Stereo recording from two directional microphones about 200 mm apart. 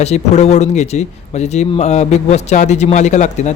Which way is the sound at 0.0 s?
35° left (ahead or behind).